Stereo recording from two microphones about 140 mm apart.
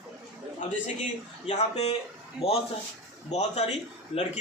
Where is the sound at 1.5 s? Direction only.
50° left (ahead or behind).